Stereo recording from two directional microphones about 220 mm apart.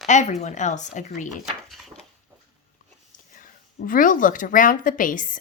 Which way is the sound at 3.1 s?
35° left (ahead or behind).